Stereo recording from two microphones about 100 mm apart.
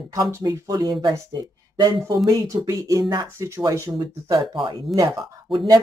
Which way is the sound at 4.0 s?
45° right (ahead or behind).